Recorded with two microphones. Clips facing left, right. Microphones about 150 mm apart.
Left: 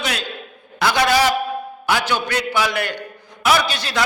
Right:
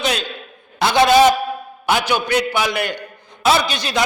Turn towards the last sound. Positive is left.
turn(degrees=-20)  # may be behind; listen again after turning